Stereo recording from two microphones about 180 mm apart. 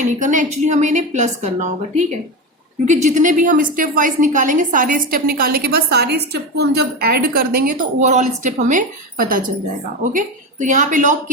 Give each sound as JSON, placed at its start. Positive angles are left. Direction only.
{"t": 0.0, "sound": "a woman's voice", "side_deg": -45}